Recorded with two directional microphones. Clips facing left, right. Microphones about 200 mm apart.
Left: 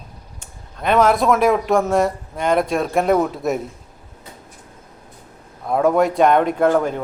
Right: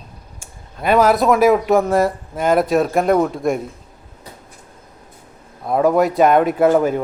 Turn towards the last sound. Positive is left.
turn(degrees=-5)  # may be behind; listen again after turning